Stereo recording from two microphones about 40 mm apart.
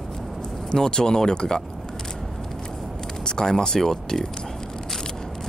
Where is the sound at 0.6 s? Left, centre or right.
Centre.